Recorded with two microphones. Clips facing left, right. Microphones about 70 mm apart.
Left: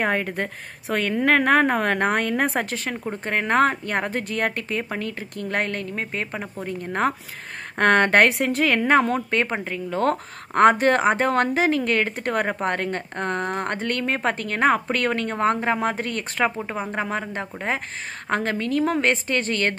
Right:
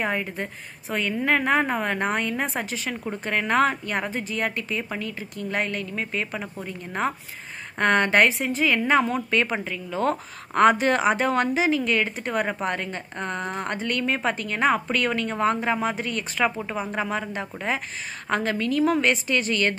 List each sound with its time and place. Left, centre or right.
0.0 s a woman's voice: left
8.3 s a woman's voice: left